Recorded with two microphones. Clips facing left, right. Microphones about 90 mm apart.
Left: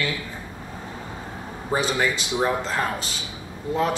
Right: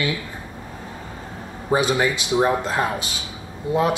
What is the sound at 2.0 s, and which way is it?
Speech, 20° right (ahead or behind).